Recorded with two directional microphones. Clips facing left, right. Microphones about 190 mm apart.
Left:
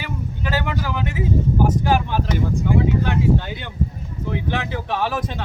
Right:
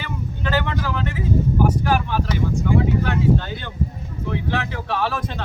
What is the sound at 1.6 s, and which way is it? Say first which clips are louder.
Speech: left 1 dB; 20° left (ahead or behind).